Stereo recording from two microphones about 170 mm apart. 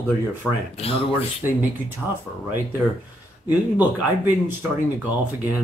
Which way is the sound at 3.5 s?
10° right (ahead or behind).